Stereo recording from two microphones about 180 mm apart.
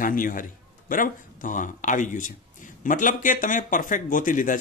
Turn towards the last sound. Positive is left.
turn(degrees=45)  # may be behind; listen again after turning